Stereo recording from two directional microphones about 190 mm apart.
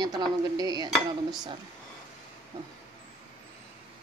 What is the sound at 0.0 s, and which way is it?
Speech, 20° right (ahead or behind).